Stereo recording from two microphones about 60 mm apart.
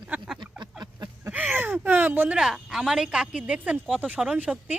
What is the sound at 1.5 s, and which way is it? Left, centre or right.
Speech, right.